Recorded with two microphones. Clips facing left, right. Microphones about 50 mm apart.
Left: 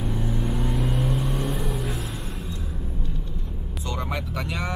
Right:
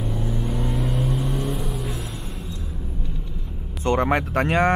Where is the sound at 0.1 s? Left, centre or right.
Centre.